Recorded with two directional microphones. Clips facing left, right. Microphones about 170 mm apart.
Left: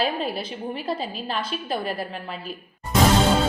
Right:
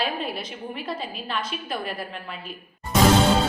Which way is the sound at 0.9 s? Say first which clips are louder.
Left 4 dB; 30° left (ahead or behind).